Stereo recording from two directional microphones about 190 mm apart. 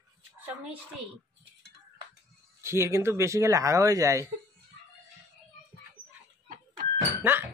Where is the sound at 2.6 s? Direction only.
15° right (ahead or behind).